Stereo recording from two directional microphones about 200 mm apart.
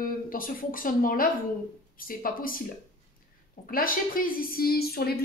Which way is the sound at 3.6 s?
45° left (ahead or behind).